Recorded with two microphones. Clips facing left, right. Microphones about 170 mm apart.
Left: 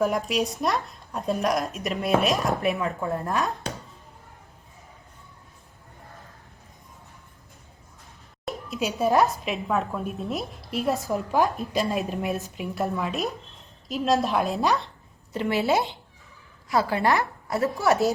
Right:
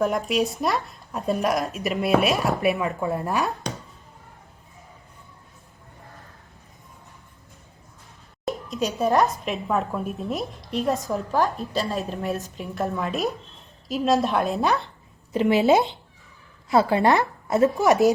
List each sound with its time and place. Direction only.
0.0 s speech: centre (ahead or behind)
8.4 s speech: 5° left (ahead or behind)
11.1 s a woman's voice: 15° left (ahead or behind)
12.6 s speech: 5° left (ahead or behind)
15.3 s a woman's voice: 20° right (ahead or behind)